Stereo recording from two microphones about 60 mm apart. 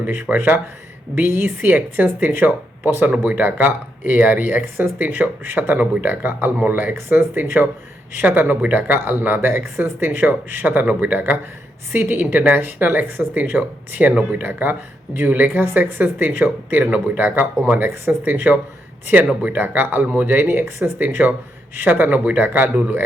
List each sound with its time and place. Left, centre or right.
0.0 s speech: right
11.9 s speech: right
21.0 s speech: right